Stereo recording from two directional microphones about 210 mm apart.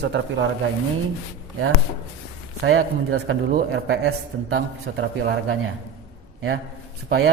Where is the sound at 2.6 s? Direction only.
75° right (ahead or behind).